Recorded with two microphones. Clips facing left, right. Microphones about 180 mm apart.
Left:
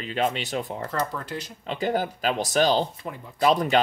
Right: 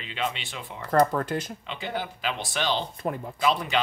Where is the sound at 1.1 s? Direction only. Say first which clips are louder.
Right 5 dB; 50° right (ahead or behind).